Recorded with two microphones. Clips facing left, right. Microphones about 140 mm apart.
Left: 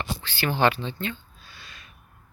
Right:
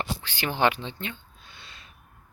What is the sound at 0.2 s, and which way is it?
Speech, 15° right (ahead or behind).